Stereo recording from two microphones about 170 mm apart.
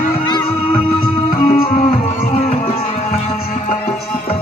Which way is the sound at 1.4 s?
45° left (ahead or behind).